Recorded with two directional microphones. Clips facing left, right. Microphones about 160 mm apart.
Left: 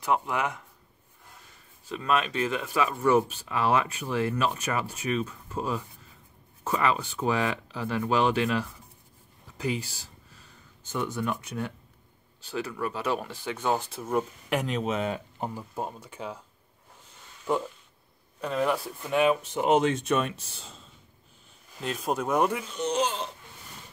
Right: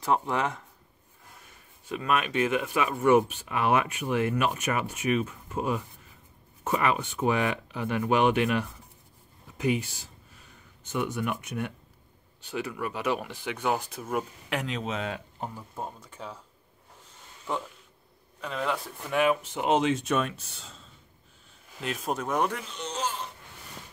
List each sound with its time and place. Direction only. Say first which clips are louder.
0.0 s speech: right 1 dB; 25° right (ahead or behind)
1.9 s speech: left 1 dB; 15° right (ahead or behind)
12.7 s speech: even; 10° right (ahead or behind)
14.1 s speech: left 3 dB; centre (ahead or behind)
18.4 s speech: left 4 dB; 10° left (ahead or behind)
21.8 s speech: left 2 dB; centre (ahead or behind); by 23.2 s 15° left (ahead or behind)